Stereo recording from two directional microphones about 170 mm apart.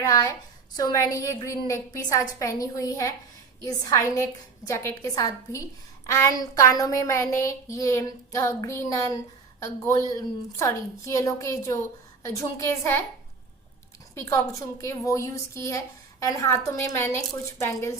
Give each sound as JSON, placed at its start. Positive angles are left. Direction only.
{"t": 0.0, "sound": "a sound", "side_deg": 20}
{"t": 9.6, "sound": "a woman's voice", "side_deg": 20}
{"t": 14.2, "sound": "a woman's voice", "side_deg": 15}